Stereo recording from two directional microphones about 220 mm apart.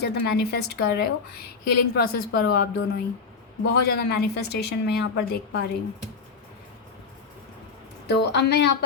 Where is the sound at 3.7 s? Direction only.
45° left (ahead or behind).